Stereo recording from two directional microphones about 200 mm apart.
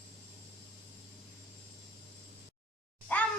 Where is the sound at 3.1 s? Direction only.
5° left (ahead or behind).